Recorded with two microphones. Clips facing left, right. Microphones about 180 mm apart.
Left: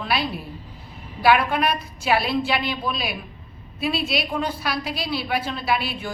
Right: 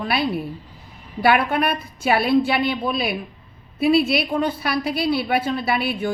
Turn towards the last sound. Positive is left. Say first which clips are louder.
# right 3 dB
turn(degrees=-55)  # may be behind; listen again after turning